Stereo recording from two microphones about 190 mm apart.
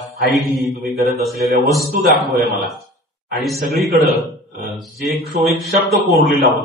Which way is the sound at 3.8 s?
Centre (ahead or behind).